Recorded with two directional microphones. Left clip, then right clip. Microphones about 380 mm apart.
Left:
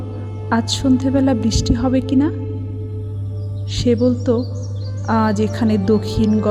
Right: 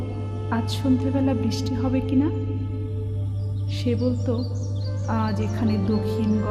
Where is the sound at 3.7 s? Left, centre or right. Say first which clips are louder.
Left 9 dB; centre.